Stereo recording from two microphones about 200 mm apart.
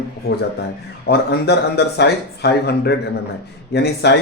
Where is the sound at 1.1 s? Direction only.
55° left (ahead or behind).